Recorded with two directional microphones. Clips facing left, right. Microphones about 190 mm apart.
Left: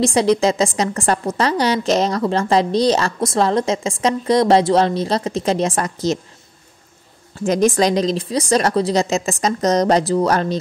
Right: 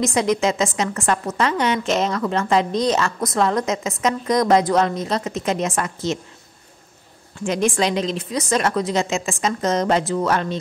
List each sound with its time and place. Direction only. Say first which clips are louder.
0.0 s a woman's voice: left 4 dB; 35° left (ahead or behind)
7.4 s a woman's voice: left 5 dB; 40° left (ahead or behind)